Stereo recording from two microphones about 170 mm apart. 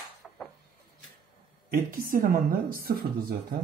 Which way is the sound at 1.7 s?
55° right (ahead or behind).